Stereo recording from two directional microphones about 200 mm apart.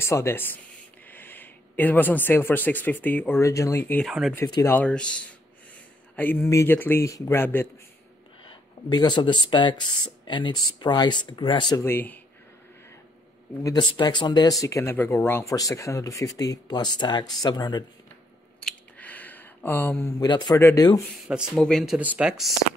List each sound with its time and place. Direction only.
0.0 s speech: 15° left (ahead or behind)
4.1 s speech: centre (ahead or behind)
4.4 s speech: 15° left (ahead or behind)
8.5 s speech: 20° left (ahead or behind)
13.7 s speech: 20° left (ahead or behind)
18.6 s a sound: 5° left (ahead or behind)
20.2 s speech: 20° left (ahead or behind)
21.3 s speech: centre (ahead or behind)